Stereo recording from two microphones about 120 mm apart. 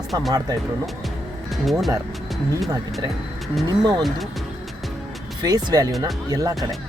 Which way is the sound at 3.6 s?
35° right (ahead or behind).